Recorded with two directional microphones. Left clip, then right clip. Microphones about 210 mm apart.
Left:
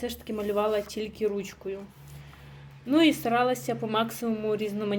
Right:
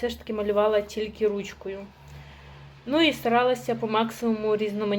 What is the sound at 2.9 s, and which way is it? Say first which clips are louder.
Speech: right 1 dB; 20° left (ahead or behind).